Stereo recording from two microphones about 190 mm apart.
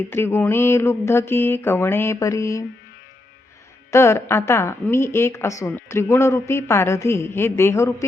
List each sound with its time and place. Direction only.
0.1 s speech: 10° left (ahead or behind)
3.9 s speech: 15° left (ahead or behind)